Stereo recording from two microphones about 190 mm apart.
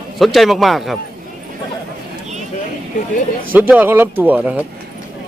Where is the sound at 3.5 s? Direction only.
10° right (ahead or behind).